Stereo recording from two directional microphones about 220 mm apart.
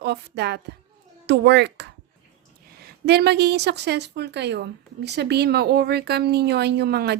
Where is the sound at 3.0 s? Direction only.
50° right (ahead or behind).